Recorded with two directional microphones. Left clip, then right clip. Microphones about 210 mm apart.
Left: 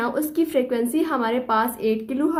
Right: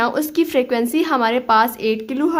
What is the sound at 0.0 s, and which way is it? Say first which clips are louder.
A woman's voice: right 5 dB; 30° right (ahead or behind).